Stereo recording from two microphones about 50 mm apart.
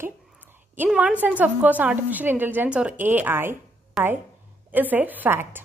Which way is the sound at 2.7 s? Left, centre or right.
Right.